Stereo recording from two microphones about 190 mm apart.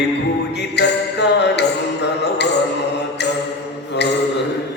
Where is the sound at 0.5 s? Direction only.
65° left (ahead or behind).